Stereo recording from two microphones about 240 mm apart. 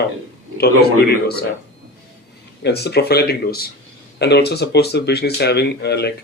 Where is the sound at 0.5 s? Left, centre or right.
Left.